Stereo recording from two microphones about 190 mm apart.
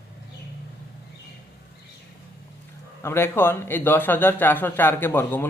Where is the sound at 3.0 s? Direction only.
15° left (ahead or behind).